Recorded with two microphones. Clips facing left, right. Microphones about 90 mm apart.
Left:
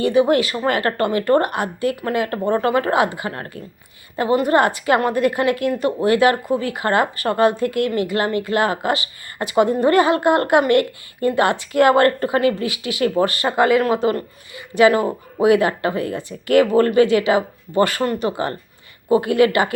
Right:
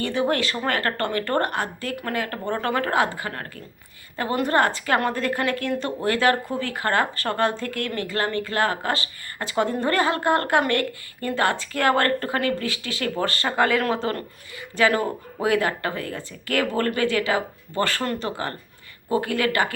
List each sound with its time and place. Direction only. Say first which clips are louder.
0.0 s speech: left 7 dB; 15° left (ahead or behind)